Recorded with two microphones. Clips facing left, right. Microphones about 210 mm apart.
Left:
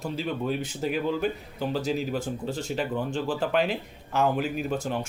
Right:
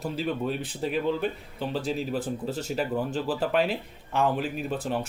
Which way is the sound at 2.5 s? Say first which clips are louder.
Even; 40° right (ahead or behind).